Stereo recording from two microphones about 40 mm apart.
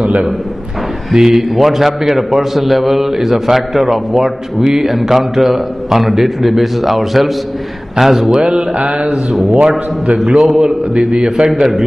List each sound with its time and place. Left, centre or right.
0.0 s a man's voice: right
1.1 s a man's voice: centre
8.3 s mantra: right
9.3 s a man's voice: centre